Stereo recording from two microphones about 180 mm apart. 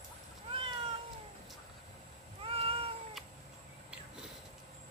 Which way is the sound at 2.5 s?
30° right (ahead or behind).